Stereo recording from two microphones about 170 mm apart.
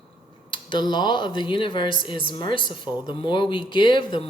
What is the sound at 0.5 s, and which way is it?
Speech, 25° left (ahead or behind).